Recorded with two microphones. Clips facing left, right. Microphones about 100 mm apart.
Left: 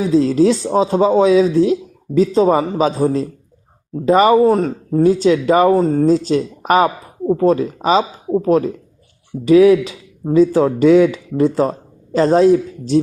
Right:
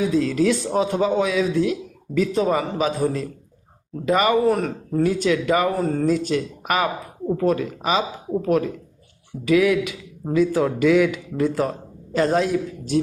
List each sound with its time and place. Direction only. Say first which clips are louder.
0.0 s speech: left 6 dB; 30° left (ahead or behind)
4.4 s speech: left 6 dB; 25° left (ahead or behind)
5.7 s speech: left 7 dB; 25° left (ahead or behind)